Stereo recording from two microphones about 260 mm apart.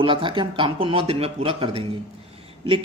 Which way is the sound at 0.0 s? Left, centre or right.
Centre.